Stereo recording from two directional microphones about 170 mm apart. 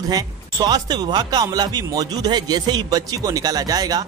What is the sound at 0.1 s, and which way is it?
Speech, 20° right (ahead or behind).